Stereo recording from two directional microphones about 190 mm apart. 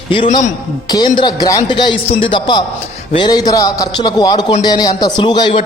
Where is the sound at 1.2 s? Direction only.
20° left (ahead or behind).